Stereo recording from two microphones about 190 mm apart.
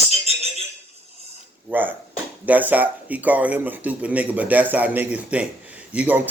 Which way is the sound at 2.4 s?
10° right (ahead or behind).